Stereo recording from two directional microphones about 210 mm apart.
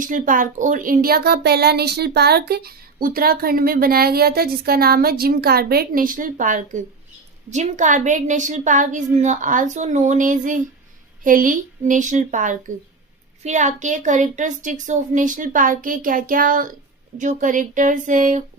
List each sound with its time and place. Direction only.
0.0 s a woman's voice: 40° right (ahead or behind)